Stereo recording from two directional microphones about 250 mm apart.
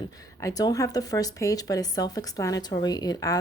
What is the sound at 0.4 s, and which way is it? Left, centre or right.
Speech, centre.